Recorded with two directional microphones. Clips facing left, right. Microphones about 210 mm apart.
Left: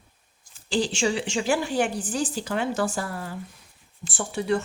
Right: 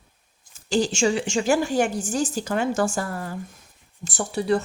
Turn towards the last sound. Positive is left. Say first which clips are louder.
# right 3 dB
turn(degrees=-40)  # may be behind; listen again after turning